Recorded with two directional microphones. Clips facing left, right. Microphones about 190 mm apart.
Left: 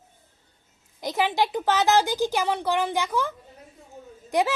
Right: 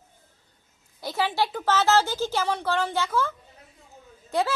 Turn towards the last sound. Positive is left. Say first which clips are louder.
# left 2 dB
turn(degrees=15)  # may be behind; listen again after turning